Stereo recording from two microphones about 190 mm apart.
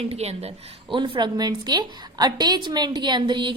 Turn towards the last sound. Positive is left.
turn(degrees=-25)  # may be behind; listen again after turning